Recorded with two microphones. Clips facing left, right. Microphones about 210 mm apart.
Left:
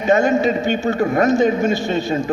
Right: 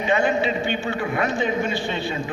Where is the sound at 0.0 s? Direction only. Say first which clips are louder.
Left 6 dB; 40° left (ahead or behind).